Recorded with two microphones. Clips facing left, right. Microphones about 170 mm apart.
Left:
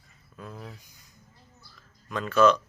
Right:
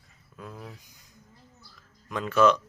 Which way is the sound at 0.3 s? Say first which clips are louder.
Even; 10° right (ahead or behind).